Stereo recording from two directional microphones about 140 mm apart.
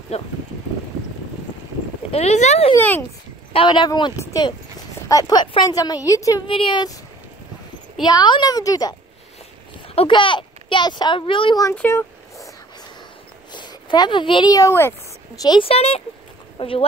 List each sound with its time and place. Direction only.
0.1 s speech: 45° left (ahead or behind)
2.0 s speech: 50° left (ahead or behind)
2.8 s speech: 15° left (ahead or behind)
3.5 s a woman's voice: 35° left (ahead or behind)
6.4 s speech: 40° left (ahead or behind)
8.0 s a woman's voice: 30° left (ahead or behind)
9.9 s speech: 35° left (ahead or behind)
11.7 s a sound: 15° left (ahead or behind)
13.5 s speech: 30° left (ahead or behind)
15.4 s speech: 35° left (ahead or behind)